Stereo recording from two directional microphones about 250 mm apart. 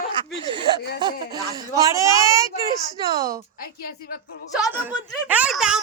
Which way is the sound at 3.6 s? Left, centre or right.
Left.